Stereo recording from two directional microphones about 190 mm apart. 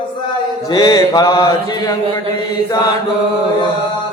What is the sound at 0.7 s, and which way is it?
Mantra, 20° left (ahead or behind).